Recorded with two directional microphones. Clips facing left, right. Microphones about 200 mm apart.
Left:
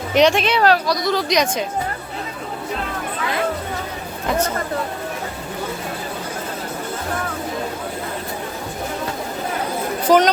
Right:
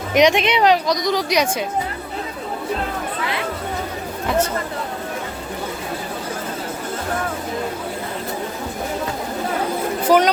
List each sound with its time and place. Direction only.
0.1 s speech: 15° right (ahead or behind)
10.1 s speech: 10° right (ahead or behind)